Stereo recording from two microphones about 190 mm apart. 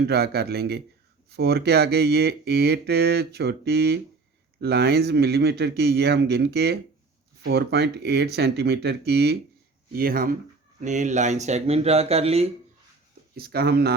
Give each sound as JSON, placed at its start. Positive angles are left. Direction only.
{"t": 0.1, "sound": "speech", "side_deg": -55}
{"t": 13.3, "sound": "speech", "side_deg": -55}